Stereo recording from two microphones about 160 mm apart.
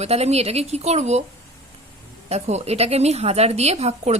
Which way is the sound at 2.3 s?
45° right (ahead or behind).